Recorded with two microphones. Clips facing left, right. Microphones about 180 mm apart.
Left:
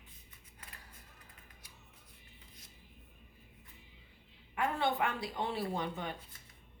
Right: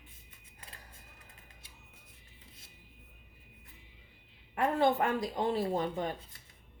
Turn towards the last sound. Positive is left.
turn(degrees=-40)  # may be behind; listen again after turning